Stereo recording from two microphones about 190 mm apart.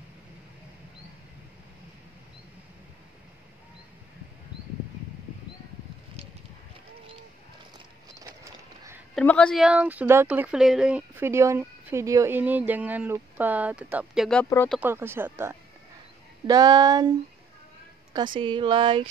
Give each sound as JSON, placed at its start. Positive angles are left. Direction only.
{"t": 9.1, "sound": "speech", "side_deg": 5}
{"t": 14.4, "sound": "speech", "side_deg": 10}
{"t": 14.8, "sound": "speech", "side_deg": -10}
{"t": 18.1, "sound": "speech", "side_deg": -25}